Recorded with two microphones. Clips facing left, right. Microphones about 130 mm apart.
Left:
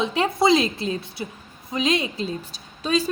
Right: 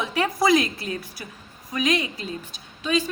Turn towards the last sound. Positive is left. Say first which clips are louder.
# left 1 dB
turn(degrees=35)  # may be behind; listen again after turning